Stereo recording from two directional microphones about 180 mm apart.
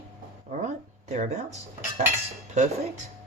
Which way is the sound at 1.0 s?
40° right (ahead or behind).